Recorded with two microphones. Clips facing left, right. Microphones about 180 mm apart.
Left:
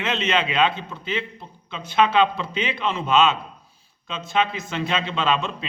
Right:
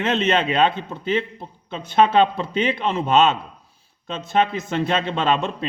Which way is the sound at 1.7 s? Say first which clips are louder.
Right 3 dB; 50° right (ahead or behind).